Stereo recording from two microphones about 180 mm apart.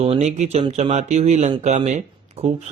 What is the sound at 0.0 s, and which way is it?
A man's voice, 35° right (ahead or behind).